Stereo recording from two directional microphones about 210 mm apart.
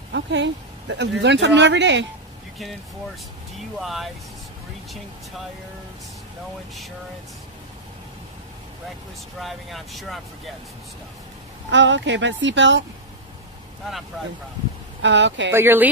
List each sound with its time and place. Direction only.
0.1 s speech: 60° right (ahead or behind)
3.8 s speech: centre (ahead or behind)
9.4 s speech: centre (ahead or behind)
11.7 s speech: 60° right (ahead or behind)
15.0 s speech: 60° right (ahead or behind)
15.5 s speech: 10° right (ahead or behind)